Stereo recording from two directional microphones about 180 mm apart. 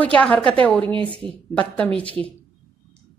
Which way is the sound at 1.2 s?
5° left (ahead or behind).